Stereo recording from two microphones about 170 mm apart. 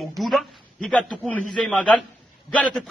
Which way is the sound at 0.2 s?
Centre (ahead or behind).